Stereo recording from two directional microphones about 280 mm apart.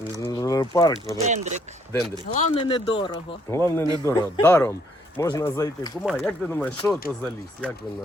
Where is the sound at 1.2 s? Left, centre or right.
Right.